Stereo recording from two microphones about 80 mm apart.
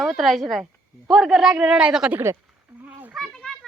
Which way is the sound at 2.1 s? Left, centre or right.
Right.